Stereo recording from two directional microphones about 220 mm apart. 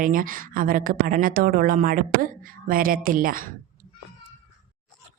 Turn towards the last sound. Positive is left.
turn(degrees=-40)  # may be behind; listen again after turning